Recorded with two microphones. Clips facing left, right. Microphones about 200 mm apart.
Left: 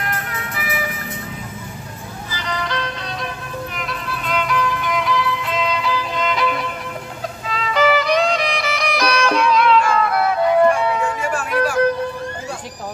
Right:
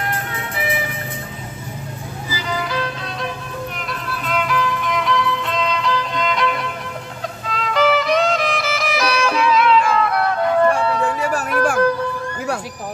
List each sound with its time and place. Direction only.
0.1 s music: 30° right (ahead or behind)
2.2 s music: 5° right (ahead or behind); by 11.1 s 15° left (ahead or behind)
11.3 s a sound: 50° right (ahead or behind)